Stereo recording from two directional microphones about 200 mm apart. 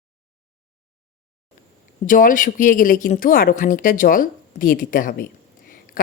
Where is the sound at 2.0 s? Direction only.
40° left (ahead or behind).